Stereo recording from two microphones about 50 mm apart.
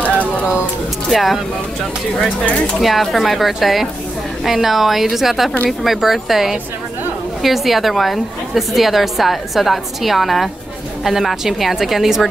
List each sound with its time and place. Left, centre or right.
1.1 s a woman's voice: centre
2.2 s speech: left
2.8 s a woman's voice: centre